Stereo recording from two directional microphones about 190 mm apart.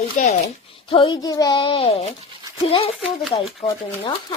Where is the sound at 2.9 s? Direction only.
Centre (ahead or behind).